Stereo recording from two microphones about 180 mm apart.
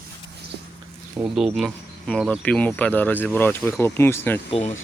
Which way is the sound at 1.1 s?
5° right (ahead or behind).